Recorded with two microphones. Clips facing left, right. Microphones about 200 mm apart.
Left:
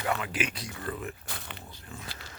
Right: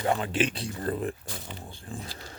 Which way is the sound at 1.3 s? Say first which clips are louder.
Right 3 dB; 65° left (ahead or behind).